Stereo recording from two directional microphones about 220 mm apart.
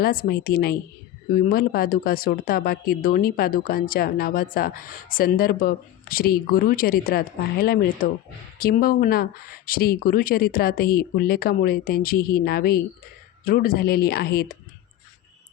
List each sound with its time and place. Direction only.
0.0 s speech: 45° left (ahead or behind)